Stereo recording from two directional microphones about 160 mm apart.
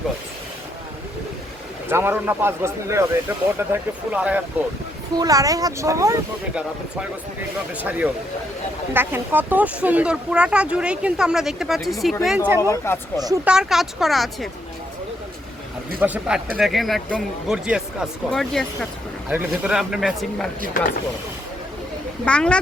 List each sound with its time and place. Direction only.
1.9 s speech: 15° right (ahead or behind)
5.1 s speech: 25° right (ahead or behind)
6.5 s speech: 5° right (ahead or behind)
12.5 s speech: 15° right (ahead or behind)
12.7 s speech: 15° left (ahead or behind)
13.1 s speech: 25° right (ahead or behind)
13.4 s speech: 5° right (ahead or behind)
16.0 s speech: 10° right (ahead or behind)
19.3 s speech: 10° right (ahead or behind)
22.2 s speech: 5° left (ahead or behind)